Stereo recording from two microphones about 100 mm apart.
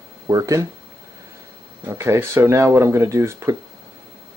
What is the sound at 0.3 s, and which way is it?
Speech, 35° right (ahead or behind).